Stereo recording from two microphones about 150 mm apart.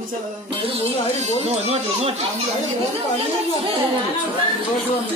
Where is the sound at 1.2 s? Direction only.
50° right (ahead or behind).